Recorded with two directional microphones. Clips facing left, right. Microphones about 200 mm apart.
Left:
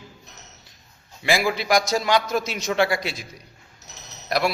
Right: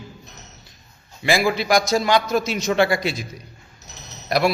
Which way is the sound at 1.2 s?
10° left (ahead or behind).